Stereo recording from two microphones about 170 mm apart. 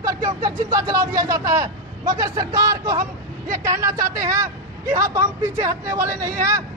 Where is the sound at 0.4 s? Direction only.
20° right (ahead or behind).